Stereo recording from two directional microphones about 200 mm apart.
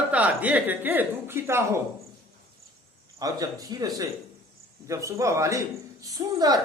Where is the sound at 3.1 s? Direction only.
20° right (ahead or behind).